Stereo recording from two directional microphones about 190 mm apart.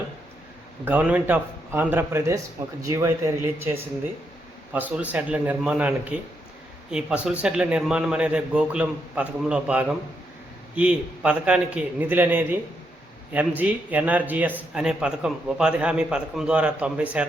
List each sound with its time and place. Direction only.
0.9 s a man's voice: 10° right (ahead or behind)
4.7 s a man's voice: 10° right (ahead or behind)